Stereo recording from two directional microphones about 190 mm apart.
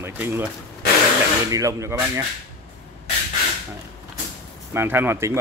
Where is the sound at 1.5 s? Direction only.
15° right (ahead or behind).